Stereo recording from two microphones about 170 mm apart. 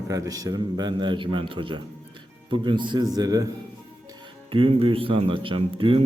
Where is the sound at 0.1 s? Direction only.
20° right (ahead or behind).